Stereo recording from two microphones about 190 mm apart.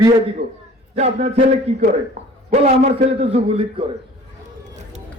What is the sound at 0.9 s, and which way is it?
Speech, 35° right (ahead or behind).